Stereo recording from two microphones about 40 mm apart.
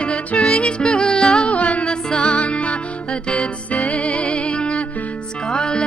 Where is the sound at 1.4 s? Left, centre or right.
Left.